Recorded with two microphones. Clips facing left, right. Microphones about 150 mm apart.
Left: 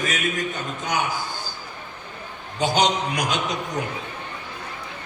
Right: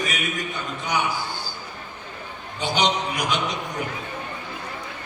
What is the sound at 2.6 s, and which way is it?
Speech, 45° left (ahead or behind).